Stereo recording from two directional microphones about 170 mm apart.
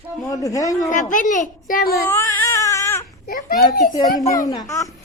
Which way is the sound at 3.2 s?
60° left (ahead or behind).